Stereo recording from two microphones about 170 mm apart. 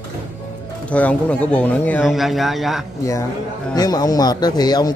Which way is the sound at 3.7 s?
25° left (ahead or behind).